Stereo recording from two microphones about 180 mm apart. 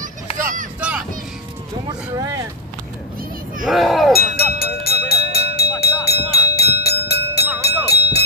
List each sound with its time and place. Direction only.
0.3 s vehicle: 35° left (ahead or behind)
0.7 s vehicle: 5° right (ahead or behind)
3.6 s wind chime: centre (ahead or behind)
4.1 s music: 60° left (ahead or behind)
5.3 s vehicle: 60° left (ahead or behind)
5.8 s a sound: 60° left (ahead or behind)